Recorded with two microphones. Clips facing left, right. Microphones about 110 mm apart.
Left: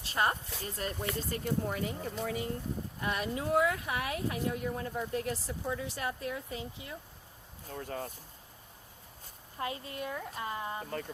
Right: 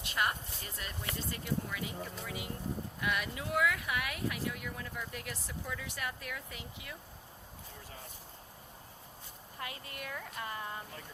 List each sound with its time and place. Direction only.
0.0 s a sound: 35° left (ahead or behind)
0.8 s speech: 40° left (ahead or behind)
3.0 s speech: 30° left (ahead or behind)
7.7 s speech: 55° left (ahead or behind)
9.6 s speech: 25° left (ahead or behind)